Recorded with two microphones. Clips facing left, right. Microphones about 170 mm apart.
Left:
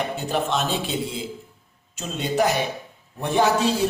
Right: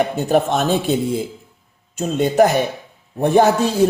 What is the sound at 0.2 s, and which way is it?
A man's voice, 50° right (ahead or behind).